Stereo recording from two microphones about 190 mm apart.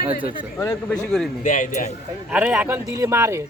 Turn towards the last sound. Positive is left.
turn(degrees=-15)  # may be behind; listen again after turning